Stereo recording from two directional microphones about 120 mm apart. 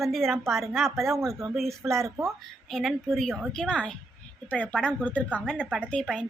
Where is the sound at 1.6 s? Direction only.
Centre (ahead or behind).